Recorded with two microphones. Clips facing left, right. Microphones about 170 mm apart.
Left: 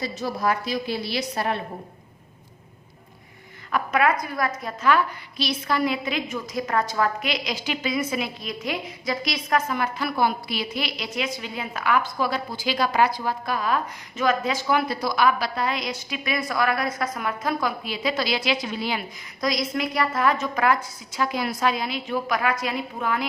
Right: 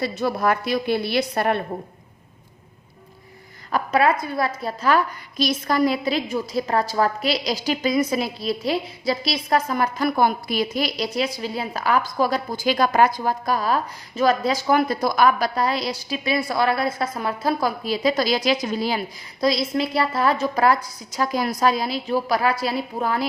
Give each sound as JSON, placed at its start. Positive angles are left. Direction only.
{"t": 0.0, "sound": "a woman's voice", "side_deg": -60}
{"t": 3.7, "sound": "a woman's voice", "side_deg": -35}